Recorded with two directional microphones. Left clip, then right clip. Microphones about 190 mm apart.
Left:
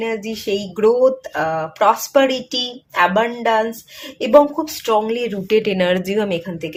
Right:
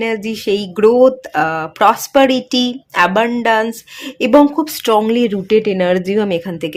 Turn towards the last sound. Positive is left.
turn(degrees=-40)  # may be behind; listen again after turning